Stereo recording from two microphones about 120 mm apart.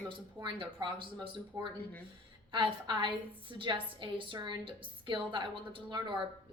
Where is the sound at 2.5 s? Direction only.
40° right (ahead or behind).